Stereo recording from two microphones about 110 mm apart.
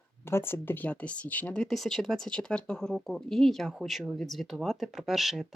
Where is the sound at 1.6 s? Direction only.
Centre (ahead or behind).